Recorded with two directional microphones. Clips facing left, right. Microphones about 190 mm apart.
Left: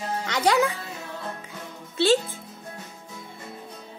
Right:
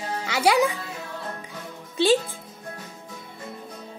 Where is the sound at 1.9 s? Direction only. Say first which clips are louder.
Right 1 dB; 15° right (ahead or behind).